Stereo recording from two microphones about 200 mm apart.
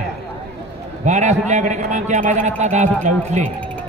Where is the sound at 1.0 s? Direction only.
35° right (ahead or behind).